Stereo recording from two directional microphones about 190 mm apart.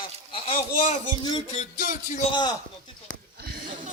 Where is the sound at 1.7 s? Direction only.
45° left (ahead or behind).